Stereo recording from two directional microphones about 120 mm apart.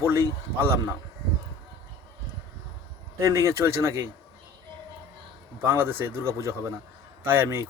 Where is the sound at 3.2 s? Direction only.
25° right (ahead or behind).